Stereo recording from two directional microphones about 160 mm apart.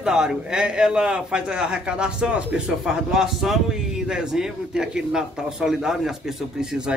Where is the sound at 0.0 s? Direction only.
5° right (ahead or behind).